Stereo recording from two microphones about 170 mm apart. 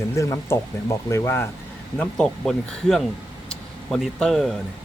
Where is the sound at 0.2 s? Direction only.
15° left (ahead or behind).